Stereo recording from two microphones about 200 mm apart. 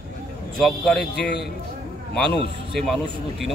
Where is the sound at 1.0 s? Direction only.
55° left (ahead or behind).